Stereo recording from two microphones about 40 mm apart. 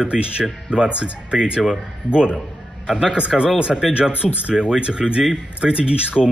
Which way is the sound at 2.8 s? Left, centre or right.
Centre.